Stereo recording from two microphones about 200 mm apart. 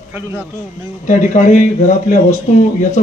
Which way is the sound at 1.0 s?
40° left (ahead or behind).